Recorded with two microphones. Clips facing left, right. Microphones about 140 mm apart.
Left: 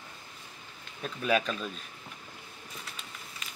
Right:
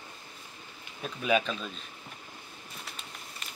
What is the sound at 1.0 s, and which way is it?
Speech, 5° right (ahead or behind).